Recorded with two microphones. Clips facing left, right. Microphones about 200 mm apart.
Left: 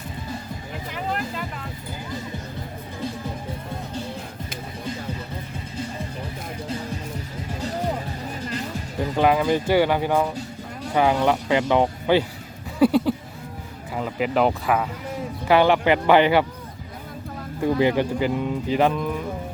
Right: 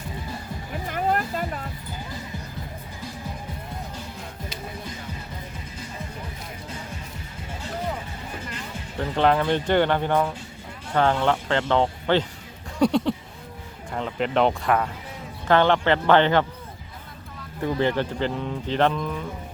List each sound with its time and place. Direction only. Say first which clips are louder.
0.9 s music: right 4 dB; 50° right (ahead or behind)
7.6 s music: left 4 dB; 40° left (ahead or behind)
9.0 s speech: left 1 dB; 10° left (ahead or behind)
12.8 s a sound: left 3 dB; 5° left (ahead or behind)
13.9 s speech: left 1 dB; 5° left (ahead or behind)
17.7 s speech: left 3 dB; 10° left (ahead or behind)